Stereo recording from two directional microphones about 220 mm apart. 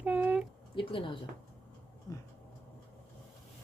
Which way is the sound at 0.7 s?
25° left (ahead or behind).